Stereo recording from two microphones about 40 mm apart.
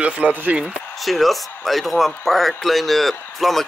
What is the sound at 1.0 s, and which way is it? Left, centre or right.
A man's voice, centre.